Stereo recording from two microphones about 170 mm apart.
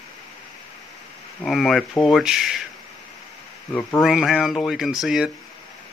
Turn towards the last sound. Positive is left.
turn(degrees=0)  # may be behind; listen again after turning